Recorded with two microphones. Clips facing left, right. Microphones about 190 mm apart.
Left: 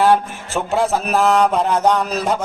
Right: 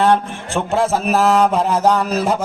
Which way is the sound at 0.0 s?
5° left (ahead or behind).